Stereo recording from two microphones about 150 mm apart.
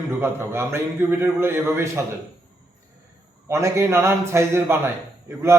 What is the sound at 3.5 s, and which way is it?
A man's voice, 20° right (ahead or behind).